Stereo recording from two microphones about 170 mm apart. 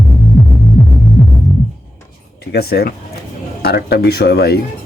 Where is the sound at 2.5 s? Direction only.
70° left (ahead or behind).